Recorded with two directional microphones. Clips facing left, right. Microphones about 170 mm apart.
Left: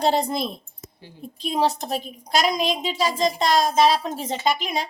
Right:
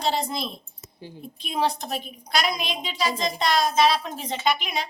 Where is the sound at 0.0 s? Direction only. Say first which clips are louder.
Left 5 dB; 50° left (ahead or behind).